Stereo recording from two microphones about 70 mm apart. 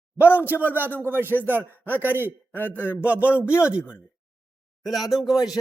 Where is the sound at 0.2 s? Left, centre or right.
Left.